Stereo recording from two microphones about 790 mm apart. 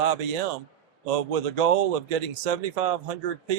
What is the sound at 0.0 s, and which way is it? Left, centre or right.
Speech, right.